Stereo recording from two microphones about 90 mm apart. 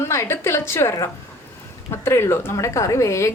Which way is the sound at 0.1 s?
30° left (ahead or behind).